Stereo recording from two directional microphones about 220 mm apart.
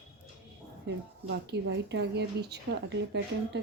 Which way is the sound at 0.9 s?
50° right (ahead or behind).